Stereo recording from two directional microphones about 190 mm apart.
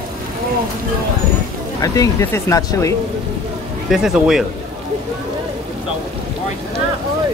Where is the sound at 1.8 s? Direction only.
20° left (ahead or behind).